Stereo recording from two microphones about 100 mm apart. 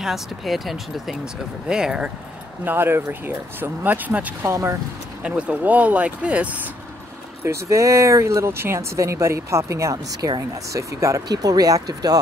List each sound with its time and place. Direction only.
0.0 s speech: centre (ahead or behind)
2.6 s speech: 20° right (ahead or behind)
4.5 s speech: 30° right (ahead or behind)
5.2 s speech: 15° right (ahead or behind)
7.4 s speech: 30° right (ahead or behind)